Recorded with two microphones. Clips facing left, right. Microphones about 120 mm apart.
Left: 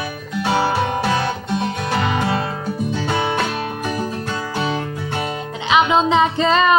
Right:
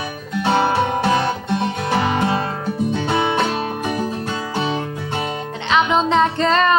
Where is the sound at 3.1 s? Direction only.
25° right (ahead or behind).